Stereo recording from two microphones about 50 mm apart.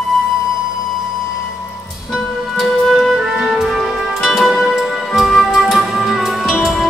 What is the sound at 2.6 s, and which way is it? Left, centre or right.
Music, centre.